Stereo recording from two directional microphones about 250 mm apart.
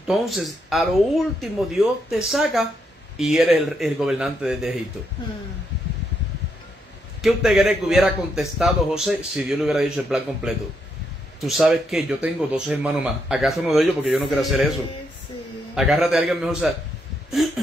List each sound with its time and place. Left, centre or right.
0.0 s a man's voice: centre
7.2 s a man's voice: centre
15.7 s a man's voice: centre